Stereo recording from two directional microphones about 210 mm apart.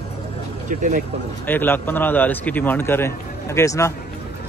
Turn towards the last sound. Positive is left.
turn(degrees=15)  # may be behind; listen again after turning